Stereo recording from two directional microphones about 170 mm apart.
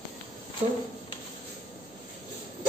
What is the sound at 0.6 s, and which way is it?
Speech, 40° right (ahead or behind).